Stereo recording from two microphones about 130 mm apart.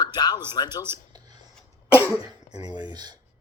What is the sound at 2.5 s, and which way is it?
Speech, 35° right (ahead or behind).